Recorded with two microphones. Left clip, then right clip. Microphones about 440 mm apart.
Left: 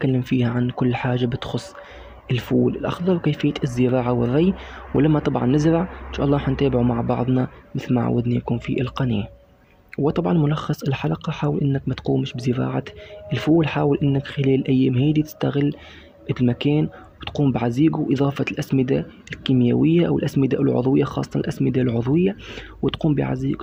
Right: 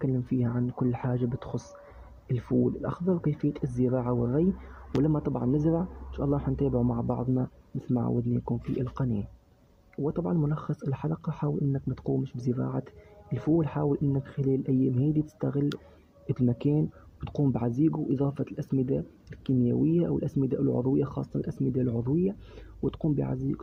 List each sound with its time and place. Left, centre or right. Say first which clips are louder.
0.0 s speech: left 8 dB; right